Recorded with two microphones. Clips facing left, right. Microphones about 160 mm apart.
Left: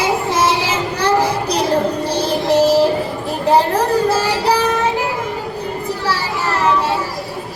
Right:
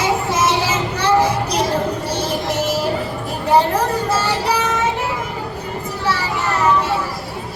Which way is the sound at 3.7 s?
35° left (ahead or behind).